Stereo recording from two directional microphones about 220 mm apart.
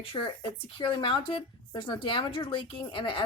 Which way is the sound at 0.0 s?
25° left (ahead or behind).